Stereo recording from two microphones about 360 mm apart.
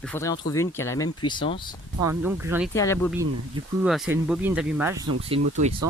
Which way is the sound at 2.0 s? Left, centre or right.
Centre.